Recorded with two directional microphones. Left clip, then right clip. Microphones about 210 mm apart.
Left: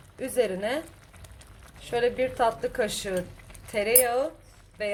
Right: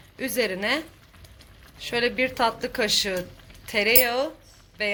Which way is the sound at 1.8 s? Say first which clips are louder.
Right 1 dB; centre (ahead or behind).